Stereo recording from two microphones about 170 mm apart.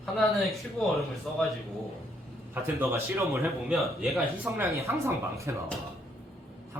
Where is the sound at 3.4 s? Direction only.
Centre (ahead or behind).